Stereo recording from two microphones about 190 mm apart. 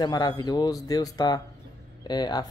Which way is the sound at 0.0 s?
20° left (ahead or behind).